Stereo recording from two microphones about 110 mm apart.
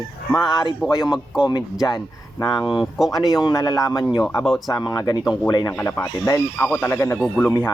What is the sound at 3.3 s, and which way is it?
Speech, 30° left (ahead or behind).